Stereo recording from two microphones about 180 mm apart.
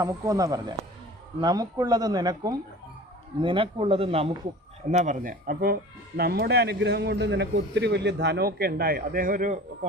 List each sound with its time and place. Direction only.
0.0 s a man's voice: 20° right (ahead or behind)
4.9 s speech: 45° right (ahead or behind)